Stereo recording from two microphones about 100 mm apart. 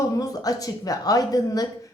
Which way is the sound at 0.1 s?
35° left (ahead or behind).